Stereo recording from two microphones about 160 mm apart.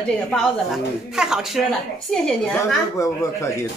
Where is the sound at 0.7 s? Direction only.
5° right (ahead or behind).